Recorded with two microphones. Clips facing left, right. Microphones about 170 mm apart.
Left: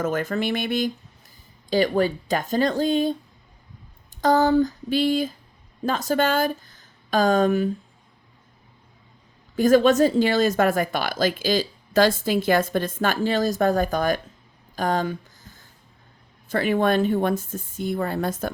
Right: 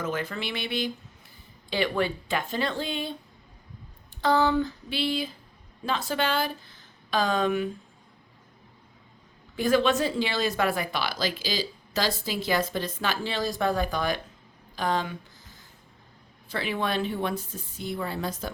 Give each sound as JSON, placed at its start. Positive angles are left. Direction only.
{"t": 0.0, "sound": "a woman's voice", "side_deg": 45}
{"t": 4.2, "sound": "a woman's voice", "side_deg": 45}
{"t": 9.6, "sound": "a woman's voice", "side_deg": 45}
{"t": 16.5, "sound": "a woman's voice", "side_deg": 45}